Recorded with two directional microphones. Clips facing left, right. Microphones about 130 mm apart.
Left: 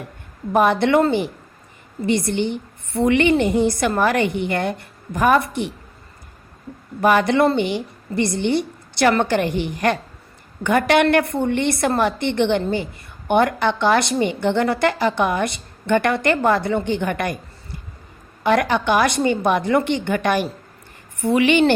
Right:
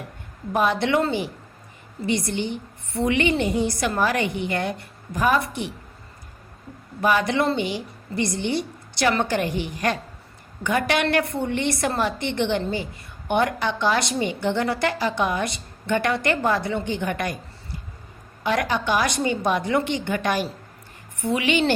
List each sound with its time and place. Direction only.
0.5 s a woman's voice: 55° left (ahead or behind)
7.0 s a woman's voice: 55° left (ahead or behind)
18.4 s a woman's voice: 55° left (ahead or behind)